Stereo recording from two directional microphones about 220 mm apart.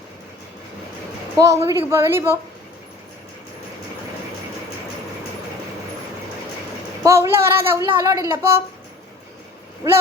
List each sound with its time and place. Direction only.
1.4 s speech: 15° right (ahead or behind)
7.0 s speech: 10° right (ahead or behind)
9.8 s speech: 15° right (ahead or behind)